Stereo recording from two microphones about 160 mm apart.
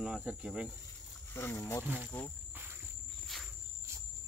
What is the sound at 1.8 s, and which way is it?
Speech, 10° right (ahead or behind).